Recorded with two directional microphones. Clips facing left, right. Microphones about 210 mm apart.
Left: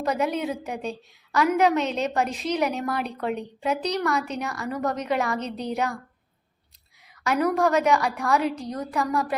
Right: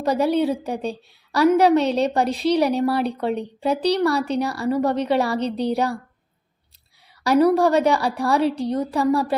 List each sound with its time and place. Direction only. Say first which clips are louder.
0.0 s a woman's voice: right 6 dB; 35° right (ahead or behind)
7.3 s a woman's voice: right 6 dB; 35° right (ahead or behind)